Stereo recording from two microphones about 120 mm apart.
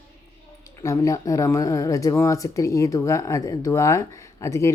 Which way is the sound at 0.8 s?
25° left (ahead or behind).